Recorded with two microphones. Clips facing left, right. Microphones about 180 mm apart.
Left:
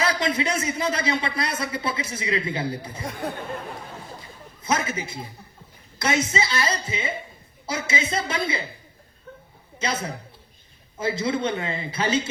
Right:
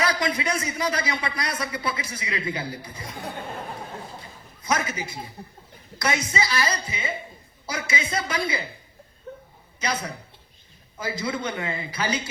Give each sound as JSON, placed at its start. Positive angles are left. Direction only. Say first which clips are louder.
{"t": 0.0, "sound": "speech", "louder": "left 1 dB", "side_deg": 25}
{"t": 4.6, "sound": "speech", "louder": "left 1 dB", "side_deg": 25}
{"t": 9.7, "sound": "a man's voice", "louder": "left 1 dB", "side_deg": 25}